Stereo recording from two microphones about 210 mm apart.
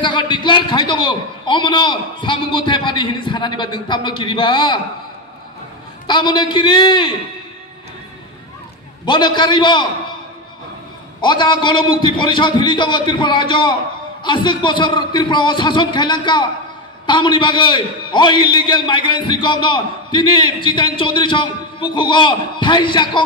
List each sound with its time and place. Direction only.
0.0 s a man's voice: 20° left (ahead or behind)
6.0 s a man's voice: 20° left (ahead or behind)
9.0 s a man's voice: 20° left (ahead or behind)
11.1 s a man's voice: 20° left (ahead or behind)